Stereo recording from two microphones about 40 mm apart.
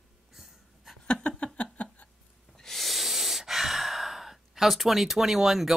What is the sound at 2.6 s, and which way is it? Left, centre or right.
Gasp, centre.